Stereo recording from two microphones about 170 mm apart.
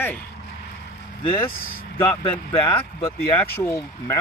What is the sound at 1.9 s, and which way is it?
Speech, 15° left (ahead or behind).